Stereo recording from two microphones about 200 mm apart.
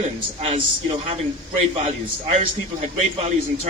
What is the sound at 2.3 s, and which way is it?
A man's voice, 30° right (ahead or behind).